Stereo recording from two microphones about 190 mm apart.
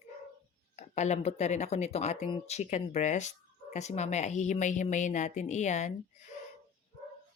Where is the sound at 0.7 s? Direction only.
35° left (ahead or behind).